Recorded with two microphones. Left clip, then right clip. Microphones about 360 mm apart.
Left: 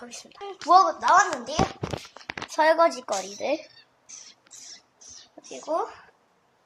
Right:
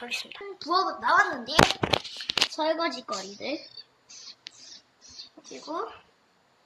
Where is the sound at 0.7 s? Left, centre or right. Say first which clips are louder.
Left 6 dB; centre.